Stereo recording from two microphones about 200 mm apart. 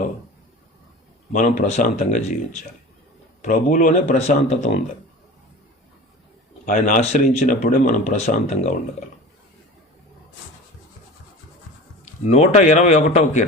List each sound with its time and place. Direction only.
1.3 s speech: 40° left (ahead or behind)
3.4 s speech: 40° left (ahead or behind)
6.7 s speech: 40° left (ahead or behind)
12.3 s speech: 30° left (ahead or behind)